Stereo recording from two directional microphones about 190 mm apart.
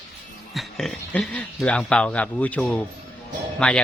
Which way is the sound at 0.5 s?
Centre (ahead or behind).